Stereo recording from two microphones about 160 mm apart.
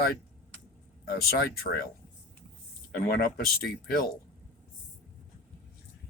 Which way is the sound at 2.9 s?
65° left (ahead or behind).